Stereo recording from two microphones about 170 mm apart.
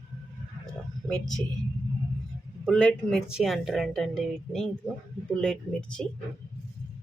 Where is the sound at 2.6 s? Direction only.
5° left (ahead or behind).